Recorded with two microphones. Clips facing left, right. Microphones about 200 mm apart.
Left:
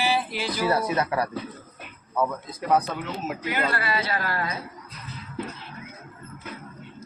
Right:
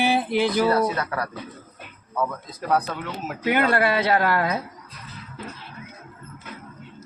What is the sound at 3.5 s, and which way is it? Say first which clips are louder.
Speech: right 8 dB; 55° right (ahead or behind).